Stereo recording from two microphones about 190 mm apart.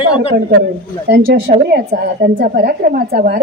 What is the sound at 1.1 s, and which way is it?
A woman's voice, 55° right (ahead or behind).